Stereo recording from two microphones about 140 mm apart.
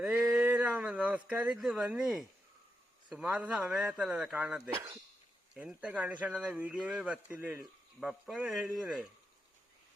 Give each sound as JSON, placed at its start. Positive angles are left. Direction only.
{"t": 0.0, "sound": "a sound", "side_deg": -5}
{"t": 3.2, "sound": "speech", "side_deg": -10}
{"t": 4.7, "sound": "speech", "side_deg": -25}
{"t": 5.5, "sound": "speech", "side_deg": -10}
{"t": 7.6, "sound": "speech", "side_deg": 0}